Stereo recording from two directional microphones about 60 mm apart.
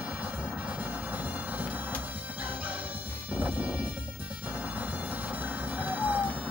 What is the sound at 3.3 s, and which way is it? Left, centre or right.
Music, right.